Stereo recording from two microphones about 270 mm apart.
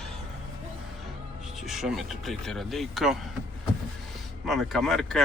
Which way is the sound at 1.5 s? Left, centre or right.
Centre.